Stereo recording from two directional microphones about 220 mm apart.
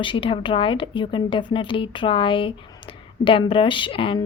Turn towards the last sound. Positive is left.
turn(degrees=25)  # may be behind; listen again after turning